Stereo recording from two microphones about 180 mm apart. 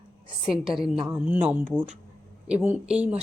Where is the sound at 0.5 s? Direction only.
Centre (ahead or behind).